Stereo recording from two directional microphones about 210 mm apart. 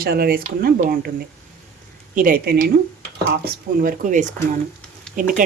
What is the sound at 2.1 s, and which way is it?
Speech, 40° right (ahead or behind).